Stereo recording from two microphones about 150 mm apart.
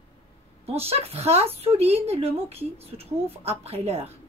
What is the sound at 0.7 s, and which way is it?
A woman's voice, 40° right (ahead or behind).